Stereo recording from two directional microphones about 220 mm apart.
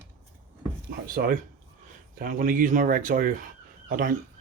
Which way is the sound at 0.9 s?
40° right (ahead or behind).